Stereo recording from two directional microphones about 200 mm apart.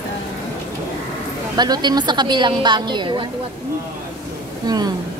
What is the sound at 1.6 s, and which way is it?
A woman's voice, 20° right (ahead or behind).